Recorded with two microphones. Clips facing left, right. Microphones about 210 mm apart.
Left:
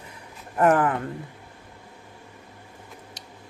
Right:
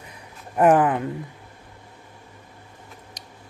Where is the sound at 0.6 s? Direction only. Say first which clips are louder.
Right 3 dB; 20° right (ahead or behind).